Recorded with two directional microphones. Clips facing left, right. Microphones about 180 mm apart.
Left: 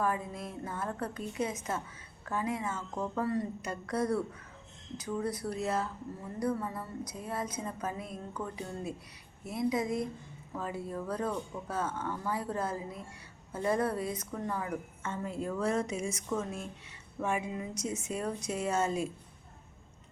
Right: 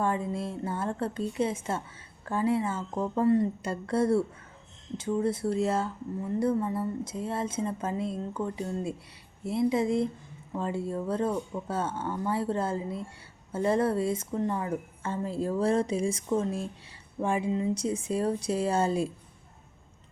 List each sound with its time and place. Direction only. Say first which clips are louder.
0.0 s a woman's voice: right 4 dB; 25° right (ahead or behind)